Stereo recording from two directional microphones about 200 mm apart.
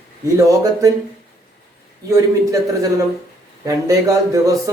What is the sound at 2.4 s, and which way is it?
Speech, 15° right (ahead or behind).